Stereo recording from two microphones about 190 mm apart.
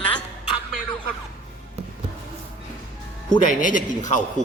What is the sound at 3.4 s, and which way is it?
Speech, 45° left (ahead or behind).